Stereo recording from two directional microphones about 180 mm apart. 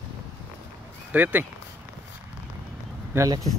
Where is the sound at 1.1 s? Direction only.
10° right (ahead or behind).